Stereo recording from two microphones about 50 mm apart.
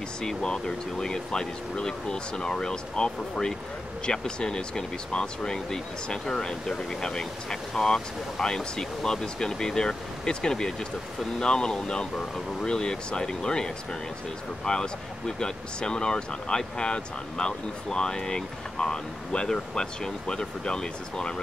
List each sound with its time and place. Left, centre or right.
0.2 s speech: centre